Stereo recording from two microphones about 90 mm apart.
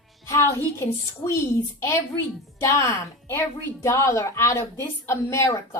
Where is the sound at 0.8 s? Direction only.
30° left (ahead or behind).